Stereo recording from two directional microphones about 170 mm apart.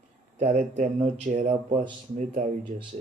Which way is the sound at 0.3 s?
45° right (ahead or behind).